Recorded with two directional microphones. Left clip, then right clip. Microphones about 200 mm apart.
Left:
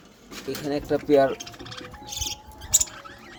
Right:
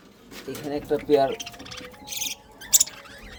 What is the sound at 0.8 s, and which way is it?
Speech, 30° left (ahead or behind).